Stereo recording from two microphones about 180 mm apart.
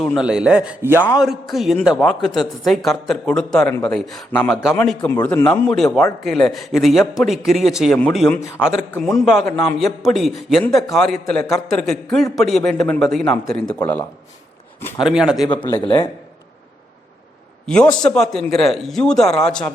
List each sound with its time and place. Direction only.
0.0 s speech: centre (ahead or behind)
4.8 s speech: 10° left (ahead or behind)
15.0 s speech: 5° right (ahead or behind)
15.7 s a man's voice: 25° left (ahead or behind)
17.7 s speech: 5° left (ahead or behind)